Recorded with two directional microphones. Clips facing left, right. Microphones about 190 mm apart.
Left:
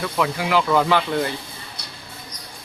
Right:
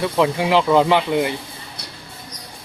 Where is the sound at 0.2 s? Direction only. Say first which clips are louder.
Right 4 dB; 25° right (ahead or behind).